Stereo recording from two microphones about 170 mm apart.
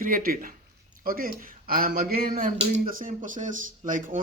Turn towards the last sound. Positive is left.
turn(degrees=-50)  # may be behind; listen again after turning